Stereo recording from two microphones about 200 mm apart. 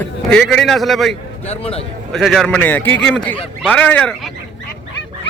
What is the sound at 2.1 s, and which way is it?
Speech, centre (ahead or behind).